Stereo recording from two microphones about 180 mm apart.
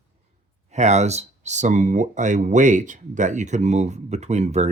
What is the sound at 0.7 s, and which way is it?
Speech, 40° right (ahead or behind).